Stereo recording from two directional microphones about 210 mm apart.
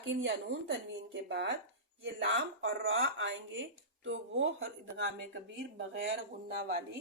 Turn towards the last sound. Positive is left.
turn(degrees=-50)  # may be behind; listen again after turning